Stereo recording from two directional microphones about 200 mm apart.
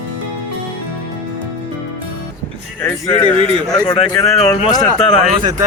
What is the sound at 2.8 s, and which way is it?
Speech, 10° left (ahead or behind).